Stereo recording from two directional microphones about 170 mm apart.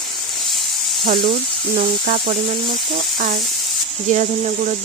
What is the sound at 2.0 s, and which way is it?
Speech, 55° right (ahead or behind).